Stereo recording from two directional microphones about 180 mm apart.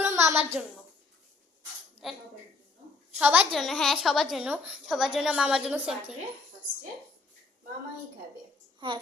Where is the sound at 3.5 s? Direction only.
Centre (ahead or behind).